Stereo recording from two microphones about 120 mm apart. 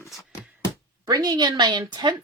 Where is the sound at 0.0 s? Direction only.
25° left (ahead or behind).